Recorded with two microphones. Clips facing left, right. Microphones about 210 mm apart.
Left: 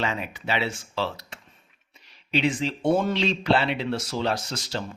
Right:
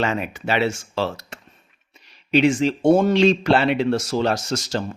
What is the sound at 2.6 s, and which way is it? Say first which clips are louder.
Speech: right 7 dB; 45° right (ahead or behind).